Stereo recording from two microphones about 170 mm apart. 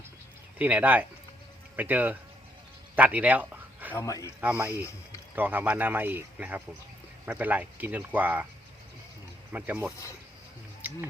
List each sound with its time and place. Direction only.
0.6 s speech: 10° right (ahead or behind)
2.9 s a sound: 10° right (ahead or behind)
3.9 s speech: 20° left (ahead or behind)
4.4 s speech: 10° right (ahead or behind)
4.8 s speech: 15° left (ahead or behind)
5.3 s speech: 10° right (ahead or behind)
9.5 s speech: 10° right (ahead or behind)
10.8 s music: 10° right (ahead or behind)